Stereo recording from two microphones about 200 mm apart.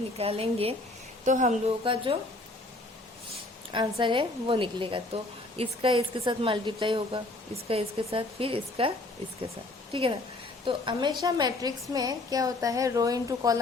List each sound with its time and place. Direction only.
0.2 s a woman's voice: 30° right (ahead or behind)
3.7 s a woman's voice: 25° right (ahead or behind)
9.9 s a woman's voice: 25° right (ahead or behind)